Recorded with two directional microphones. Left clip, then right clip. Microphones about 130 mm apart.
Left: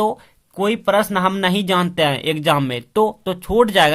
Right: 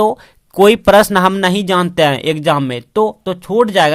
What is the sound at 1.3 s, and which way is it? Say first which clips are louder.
Speech: right 4 dB; 30° right (ahead or behind).